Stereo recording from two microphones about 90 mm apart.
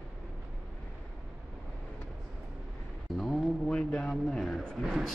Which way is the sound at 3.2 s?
Centre (ahead or behind).